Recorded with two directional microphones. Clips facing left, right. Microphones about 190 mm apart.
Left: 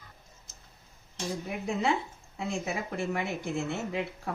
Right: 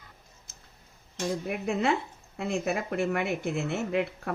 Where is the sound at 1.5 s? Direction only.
65° right (ahead or behind).